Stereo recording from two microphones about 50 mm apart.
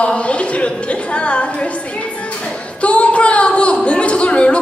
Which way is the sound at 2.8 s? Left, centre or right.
Left.